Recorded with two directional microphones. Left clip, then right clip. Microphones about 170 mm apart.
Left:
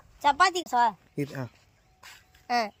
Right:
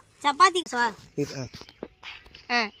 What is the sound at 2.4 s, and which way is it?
Speech, 20° left (ahead or behind).